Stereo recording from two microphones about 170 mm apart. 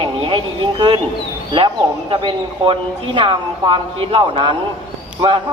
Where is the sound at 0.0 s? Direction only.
30° right (ahead or behind).